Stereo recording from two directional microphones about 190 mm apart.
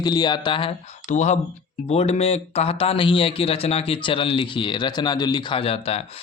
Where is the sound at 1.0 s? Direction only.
40° left (ahead or behind).